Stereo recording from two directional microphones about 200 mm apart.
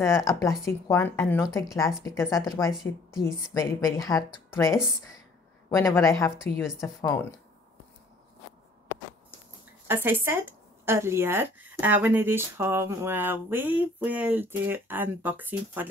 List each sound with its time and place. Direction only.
0.0 s speech: 15° left (ahead or behind)
5.8 s speech: 15° left (ahead or behind)
6.6 s speech: centre (ahead or behind)
7.0 s speech: 10° left (ahead or behind)
9.8 s speech: 10° right (ahead or behind)